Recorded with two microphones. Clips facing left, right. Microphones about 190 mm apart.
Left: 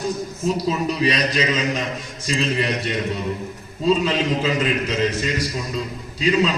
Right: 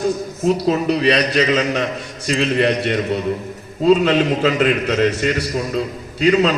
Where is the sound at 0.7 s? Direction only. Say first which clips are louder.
Right 6 dB; 65° right (ahead or behind).